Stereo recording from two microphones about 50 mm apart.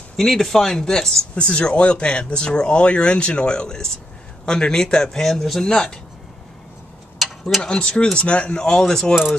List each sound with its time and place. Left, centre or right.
0.1 s speech: centre
1.3 s speech: left
7.6 s speech: centre